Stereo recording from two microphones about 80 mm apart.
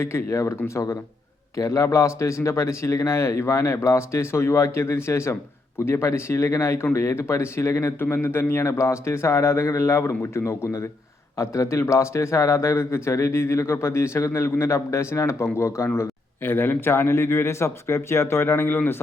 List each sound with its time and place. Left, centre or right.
0.0 s a man's voice: left